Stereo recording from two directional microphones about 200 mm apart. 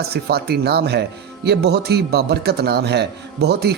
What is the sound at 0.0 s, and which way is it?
A man's voice, 50° right (ahead or behind).